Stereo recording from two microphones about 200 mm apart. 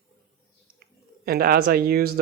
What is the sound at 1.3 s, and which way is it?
Speech, 50° right (ahead or behind).